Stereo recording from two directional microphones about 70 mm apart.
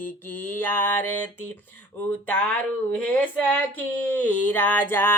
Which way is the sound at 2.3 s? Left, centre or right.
Centre.